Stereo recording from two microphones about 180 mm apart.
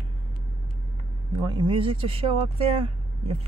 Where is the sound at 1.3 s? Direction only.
25° right (ahead or behind).